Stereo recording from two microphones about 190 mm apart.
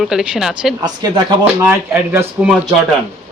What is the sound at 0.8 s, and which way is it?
Speech, 20° right (ahead or behind).